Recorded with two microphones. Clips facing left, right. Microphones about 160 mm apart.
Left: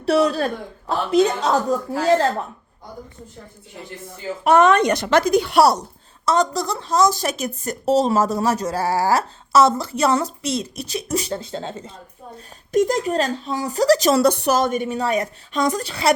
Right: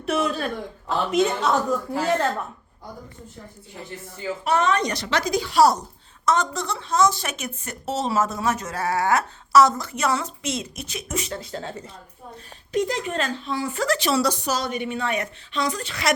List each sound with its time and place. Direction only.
0.0 s speech: 35° left (ahead or behind)
4.4 s speech: 55° left (ahead or behind)
6.2 s speech: 35° left (ahead or behind)
12.7 s speech: 45° left (ahead or behind)